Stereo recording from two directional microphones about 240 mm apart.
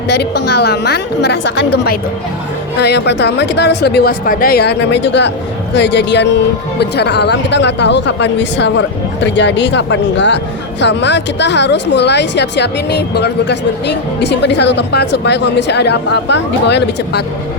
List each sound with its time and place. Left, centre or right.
0.4 s speech: left
2.8 s speech: left